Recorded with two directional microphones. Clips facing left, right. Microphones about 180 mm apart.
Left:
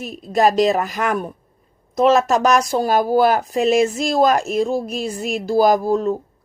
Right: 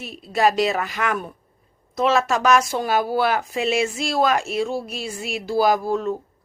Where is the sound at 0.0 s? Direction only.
45° left (ahead or behind).